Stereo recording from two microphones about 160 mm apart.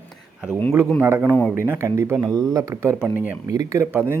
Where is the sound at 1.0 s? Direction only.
15° right (ahead or behind).